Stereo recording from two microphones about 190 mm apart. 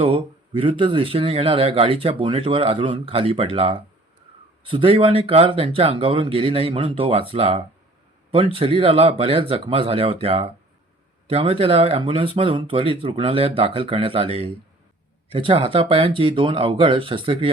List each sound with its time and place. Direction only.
0.0 s speech: 30° right (ahead or behind)